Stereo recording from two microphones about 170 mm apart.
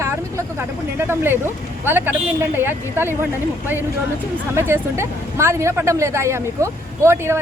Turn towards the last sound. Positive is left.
turn(degrees=-15)  # may be behind; listen again after turning